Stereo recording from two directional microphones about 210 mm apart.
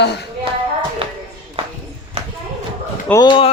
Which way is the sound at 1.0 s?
25° right (ahead or behind).